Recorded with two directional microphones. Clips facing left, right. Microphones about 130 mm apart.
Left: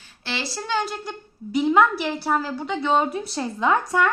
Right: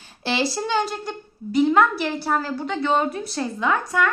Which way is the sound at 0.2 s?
20° right (ahead or behind).